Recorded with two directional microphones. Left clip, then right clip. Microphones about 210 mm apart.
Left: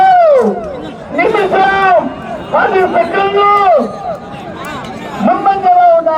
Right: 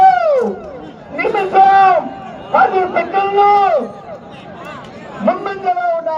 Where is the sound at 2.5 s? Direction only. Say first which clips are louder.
Left 2 dB; 20° right (ahead or behind).